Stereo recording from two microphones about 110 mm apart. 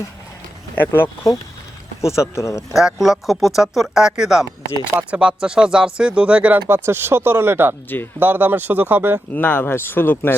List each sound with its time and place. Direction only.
0.9 s speech: 25° left (ahead or behind)
2.7 s speech: centre (ahead or behind)
9.3 s speech: 15° left (ahead or behind)